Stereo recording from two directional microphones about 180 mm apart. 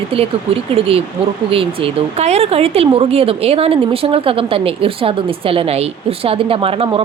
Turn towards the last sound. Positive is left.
turn(degrees=-30)  # may be behind; listen again after turning